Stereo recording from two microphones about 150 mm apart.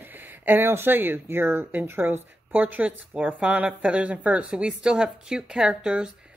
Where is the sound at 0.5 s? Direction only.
15° right (ahead or behind).